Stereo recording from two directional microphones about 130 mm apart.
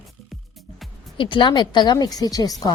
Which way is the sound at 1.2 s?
40° left (ahead or behind).